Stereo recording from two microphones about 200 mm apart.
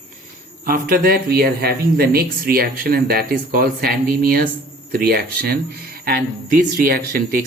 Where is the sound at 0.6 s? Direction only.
45° right (ahead or behind).